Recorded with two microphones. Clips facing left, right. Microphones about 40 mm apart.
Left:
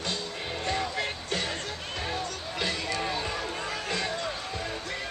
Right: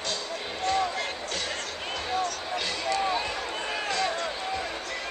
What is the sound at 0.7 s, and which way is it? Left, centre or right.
Music, centre.